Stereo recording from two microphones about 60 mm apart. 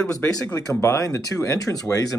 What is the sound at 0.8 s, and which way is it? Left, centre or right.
Speech, left.